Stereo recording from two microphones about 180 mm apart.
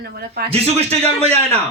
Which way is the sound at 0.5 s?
35° right (ahead or behind).